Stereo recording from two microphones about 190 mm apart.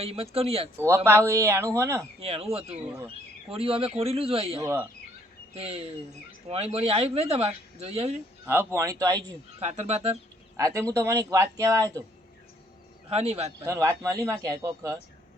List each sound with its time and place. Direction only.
0.0 s speech: 30° right (ahead or behind)
0.8 s speech: 15° right (ahead or behind)
2.2 s speech: 30° right (ahead or behind)
4.6 s speech: 10° right (ahead or behind)
5.5 s speech: 30° right (ahead or behind)
8.4 s speech: 15° right (ahead or behind)
9.6 s speech: 35° right (ahead or behind)
10.6 s speech: 15° right (ahead or behind)
13.1 s speech: 35° right (ahead or behind)
13.6 s speech: 15° right (ahead or behind)